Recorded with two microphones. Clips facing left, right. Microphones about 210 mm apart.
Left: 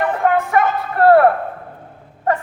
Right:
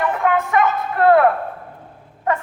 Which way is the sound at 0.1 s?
40° left (ahead or behind).